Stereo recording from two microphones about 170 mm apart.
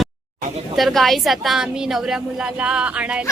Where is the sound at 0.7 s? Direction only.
Centre (ahead or behind).